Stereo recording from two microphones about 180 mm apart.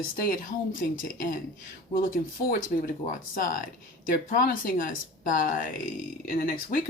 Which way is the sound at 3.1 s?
50° left (ahead or behind).